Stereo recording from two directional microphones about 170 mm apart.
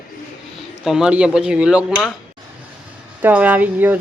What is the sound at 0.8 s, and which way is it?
Speech, 5° right (ahead or behind).